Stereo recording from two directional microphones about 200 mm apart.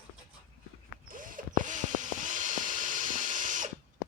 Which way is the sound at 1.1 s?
45° right (ahead or behind).